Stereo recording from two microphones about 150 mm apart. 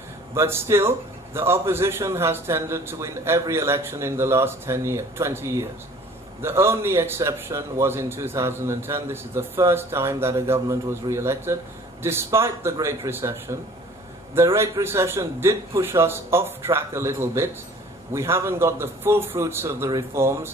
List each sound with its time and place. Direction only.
0.3 s a man's voice: 15° right (ahead or behind)